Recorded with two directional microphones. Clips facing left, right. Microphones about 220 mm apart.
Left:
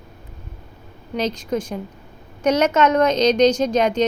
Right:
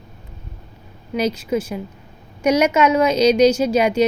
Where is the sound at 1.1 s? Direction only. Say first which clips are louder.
Right 2 dB; 10° right (ahead or behind).